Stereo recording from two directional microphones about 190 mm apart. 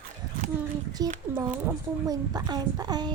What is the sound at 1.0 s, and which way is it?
Speech, 20° right (ahead or behind).